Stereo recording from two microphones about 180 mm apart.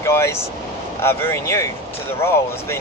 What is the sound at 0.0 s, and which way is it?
Speech, 15° left (ahead or behind).